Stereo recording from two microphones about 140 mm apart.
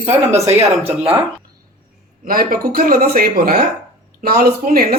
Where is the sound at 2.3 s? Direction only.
90° right.